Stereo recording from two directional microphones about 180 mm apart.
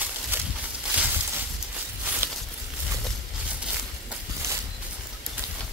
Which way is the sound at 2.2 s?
10° right (ahead or behind).